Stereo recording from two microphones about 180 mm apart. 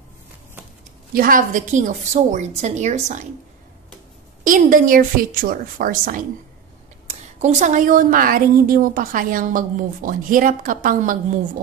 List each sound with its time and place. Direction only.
1.1 s a woman's voice: 50° right (ahead or behind)
4.5 s a woman's voice: 45° right (ahead or behind)